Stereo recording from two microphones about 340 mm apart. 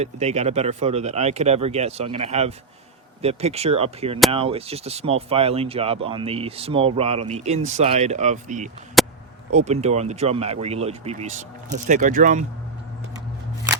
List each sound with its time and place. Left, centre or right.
0.0 s speech: centre
9.0 s a sound: centre
9.5 s speech: centre